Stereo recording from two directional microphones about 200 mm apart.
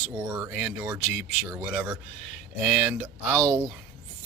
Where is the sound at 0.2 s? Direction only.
15° right (ahead or behind).